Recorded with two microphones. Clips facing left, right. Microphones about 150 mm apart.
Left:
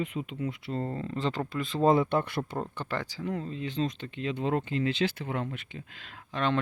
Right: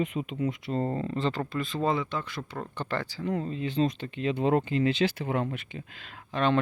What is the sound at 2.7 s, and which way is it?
Speech, 15° left (ahead or behind).